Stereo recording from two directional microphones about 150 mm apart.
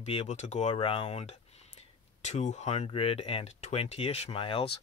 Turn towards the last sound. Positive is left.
turn(degrees=40)  # may be behind; listen again after turning